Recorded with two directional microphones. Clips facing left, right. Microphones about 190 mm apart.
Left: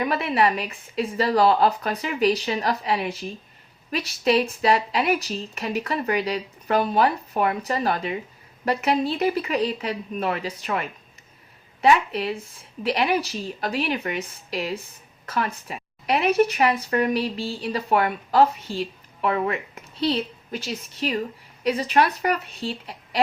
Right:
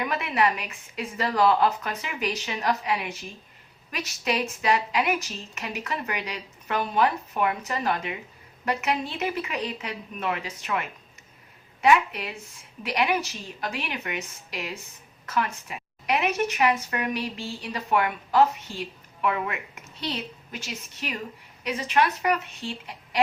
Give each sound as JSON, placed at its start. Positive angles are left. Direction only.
{"t": 0.1, "sound": "speech", "side_deg": 30}